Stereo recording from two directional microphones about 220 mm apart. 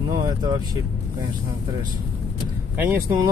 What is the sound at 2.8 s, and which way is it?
Speech, 10° right (ahead or behind).